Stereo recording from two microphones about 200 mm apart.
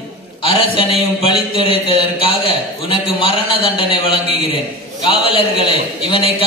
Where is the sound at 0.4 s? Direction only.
25° left (ahead or behind).